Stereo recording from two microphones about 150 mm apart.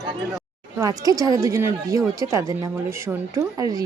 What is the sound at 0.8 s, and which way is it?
A woman's voice, 25° right (ahead or behind).